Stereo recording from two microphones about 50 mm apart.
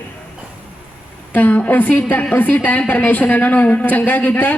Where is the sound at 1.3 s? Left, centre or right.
Left.